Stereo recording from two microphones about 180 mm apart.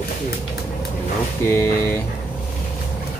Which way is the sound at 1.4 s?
15° left (ahead or behind).